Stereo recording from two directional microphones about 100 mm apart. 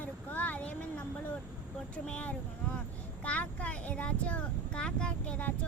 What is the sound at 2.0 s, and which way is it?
Speech, 10° left (ahead or behind).